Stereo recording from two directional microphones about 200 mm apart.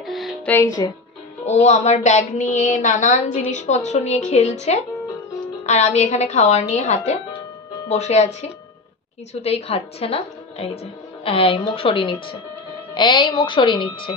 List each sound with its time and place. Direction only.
0.0 s music: centre (ahead or behind)
1.4 s a woman's voice: 35° left (ahead or behind)